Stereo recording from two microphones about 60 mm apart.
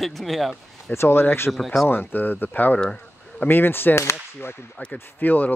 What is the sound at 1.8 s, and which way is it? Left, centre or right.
Speech, left.